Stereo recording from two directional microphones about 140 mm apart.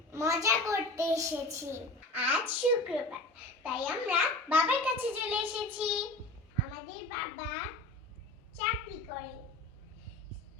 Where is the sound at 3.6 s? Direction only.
10° right (ahead or behind).